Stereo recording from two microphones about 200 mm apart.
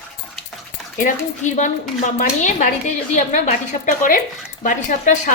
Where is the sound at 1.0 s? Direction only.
40° left (ahead or behind).